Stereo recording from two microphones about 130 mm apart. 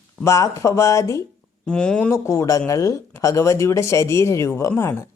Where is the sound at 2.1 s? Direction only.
20° left (ahead or behind).